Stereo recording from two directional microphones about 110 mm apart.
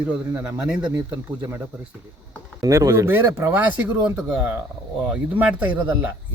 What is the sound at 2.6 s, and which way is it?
Speech, 30° right (ahead or behind).